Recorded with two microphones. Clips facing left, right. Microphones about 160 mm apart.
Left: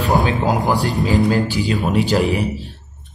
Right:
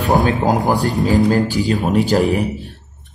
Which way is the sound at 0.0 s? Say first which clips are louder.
Right 2 dB; 45° right (ahead or behind).